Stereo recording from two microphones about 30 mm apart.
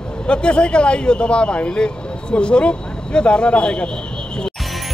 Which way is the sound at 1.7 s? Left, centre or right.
Left.